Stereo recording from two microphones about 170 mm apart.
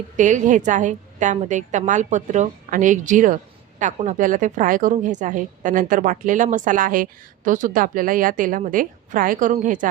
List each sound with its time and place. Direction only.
0.2 s speech: 45° right (ahead or behind)